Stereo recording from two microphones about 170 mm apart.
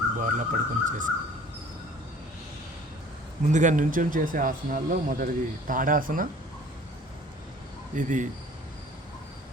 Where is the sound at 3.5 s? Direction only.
45° right (ahead or behind).